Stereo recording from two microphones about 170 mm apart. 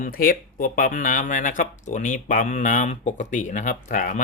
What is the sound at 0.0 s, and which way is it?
Speech, 55° left (ahead or behind).